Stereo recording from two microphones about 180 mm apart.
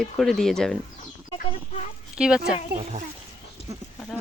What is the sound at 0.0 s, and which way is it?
Speech, centre (ahead or behind).